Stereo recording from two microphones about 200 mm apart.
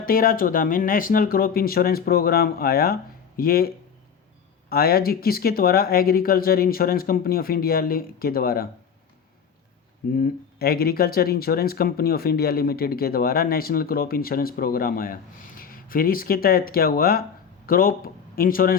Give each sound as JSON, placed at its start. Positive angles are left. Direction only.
{"t": 0.0, "sound": "speech", "side_deg": 45}
{"t": 4.7, "sound": "speech", "side_deg": 50}
{"t": 10.2, "sound": "speech", "side_deg": 45}